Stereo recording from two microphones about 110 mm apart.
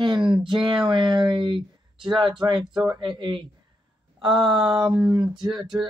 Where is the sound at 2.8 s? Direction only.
40° right (ahead or behind).